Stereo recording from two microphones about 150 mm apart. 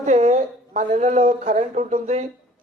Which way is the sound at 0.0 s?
45° right (ahead or behind).